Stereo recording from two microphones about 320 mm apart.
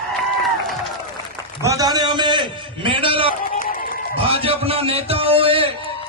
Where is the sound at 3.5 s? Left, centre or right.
Left.